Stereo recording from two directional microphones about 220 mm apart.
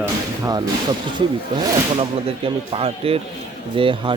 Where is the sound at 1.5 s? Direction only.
25° right (ahead or behind).